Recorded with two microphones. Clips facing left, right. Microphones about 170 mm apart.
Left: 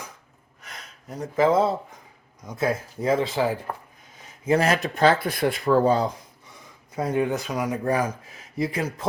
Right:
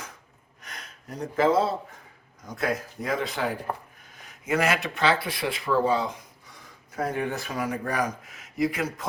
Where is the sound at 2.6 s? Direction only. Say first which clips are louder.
Left 3 dB; 25° left (ahead or behind).